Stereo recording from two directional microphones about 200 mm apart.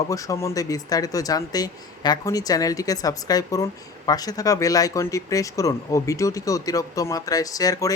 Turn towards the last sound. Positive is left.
turn(degrees=15)  # may be behind; listen again after turning